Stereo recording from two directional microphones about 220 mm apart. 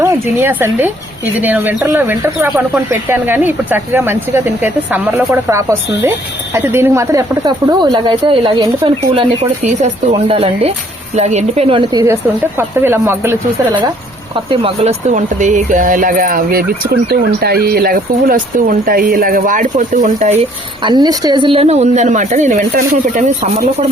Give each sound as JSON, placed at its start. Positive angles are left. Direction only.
{"t": 0.0, "sound": "speech", "side_deg": -10}
{"t": 14.3, "sound": "speech", "side_deg": -25}
{"t": 20.4, "sound": "speech", "side_deg": -20}